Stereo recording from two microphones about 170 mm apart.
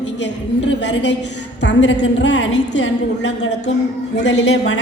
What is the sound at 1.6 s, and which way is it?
A woman's voice, 90° left.